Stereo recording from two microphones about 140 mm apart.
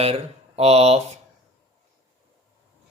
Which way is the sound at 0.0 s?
45° right (ahead or behind).